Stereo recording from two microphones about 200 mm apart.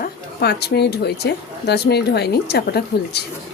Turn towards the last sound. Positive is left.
turn(degrees=55)  # may be behind; listen again after turning